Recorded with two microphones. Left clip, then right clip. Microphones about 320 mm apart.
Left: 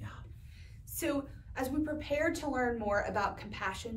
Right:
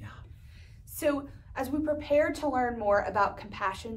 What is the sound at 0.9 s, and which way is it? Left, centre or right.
A woman's voice, centre.